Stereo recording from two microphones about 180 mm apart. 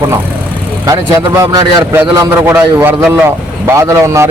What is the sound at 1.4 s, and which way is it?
Speech, 20° right (ahead or behind).